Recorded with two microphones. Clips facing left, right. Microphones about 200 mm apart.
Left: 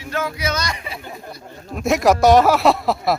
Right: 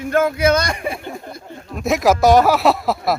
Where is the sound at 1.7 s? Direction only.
Centre (ahead or behind).